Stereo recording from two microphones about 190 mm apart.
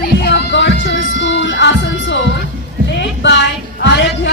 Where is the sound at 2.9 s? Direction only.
70° left (ahead or behind).